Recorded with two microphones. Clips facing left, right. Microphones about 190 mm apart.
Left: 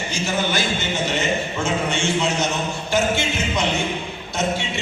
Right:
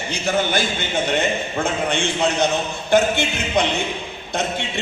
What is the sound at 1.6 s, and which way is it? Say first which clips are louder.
A man's voice: right 2 dB; 55° right (ahead or behind).